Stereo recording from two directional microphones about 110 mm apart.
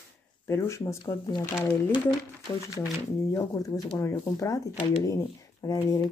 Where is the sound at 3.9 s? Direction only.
30° left (ahead or behind).